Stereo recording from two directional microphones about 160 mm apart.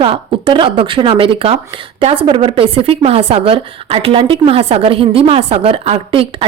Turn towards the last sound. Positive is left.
turn(degrees=-35)  # may be behind; listen again after turning